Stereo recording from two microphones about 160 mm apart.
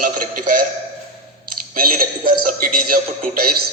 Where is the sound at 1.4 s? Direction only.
65° right (ahead or behind).